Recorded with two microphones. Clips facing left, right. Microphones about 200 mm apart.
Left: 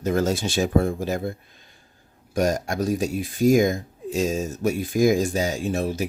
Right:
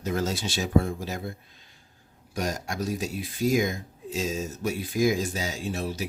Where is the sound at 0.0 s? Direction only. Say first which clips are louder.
Left 6 dB; 50° left (ahead or behind).